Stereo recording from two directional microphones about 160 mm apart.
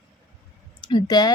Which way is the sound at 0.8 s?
25° left (ahead or behind).